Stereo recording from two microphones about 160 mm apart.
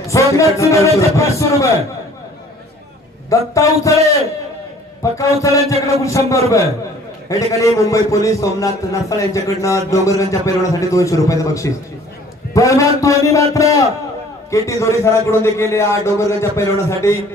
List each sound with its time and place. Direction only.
0.0 s a man's voice: 20° left (ahead or behind)
3.3 s a man's voice: 20° left (ahead or behind)
5.1 s a man's voice: 20° left (ahead or behind)
7.5 s a man's voice: 20° left (ahead or behind)